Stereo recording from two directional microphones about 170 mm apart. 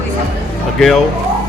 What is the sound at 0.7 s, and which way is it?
Speech, centre (ahead or behind).